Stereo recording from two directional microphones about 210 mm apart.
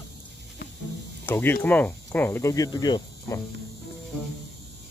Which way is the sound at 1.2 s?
10° left (ahead or behind).